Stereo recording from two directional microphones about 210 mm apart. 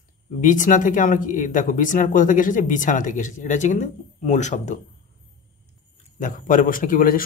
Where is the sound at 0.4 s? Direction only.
40° left (ahead or behind).